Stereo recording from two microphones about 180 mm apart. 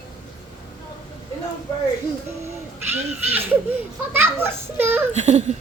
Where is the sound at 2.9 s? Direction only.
10° right (ahead or behind).